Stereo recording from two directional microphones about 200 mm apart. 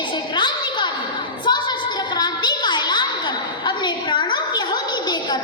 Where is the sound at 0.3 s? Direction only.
20° left (ahead or behind).